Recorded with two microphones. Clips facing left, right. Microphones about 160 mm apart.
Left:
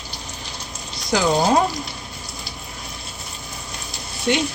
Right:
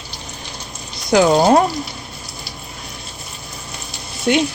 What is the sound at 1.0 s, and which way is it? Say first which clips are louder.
Speech: right 6 dB; 60° right (ahead or behind).